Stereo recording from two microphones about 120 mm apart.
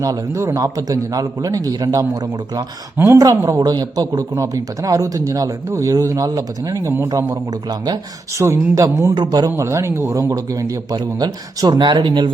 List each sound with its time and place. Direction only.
0.0 s a man's voice: 25° right (ahead or behind)
8.4 s a man's voice: 25° right (ahead or behind)